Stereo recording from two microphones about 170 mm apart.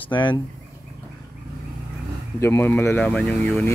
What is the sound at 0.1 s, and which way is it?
Speech, 30° left (ahead or behind).